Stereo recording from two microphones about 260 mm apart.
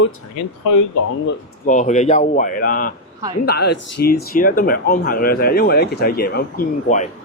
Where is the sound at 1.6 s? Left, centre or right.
Left.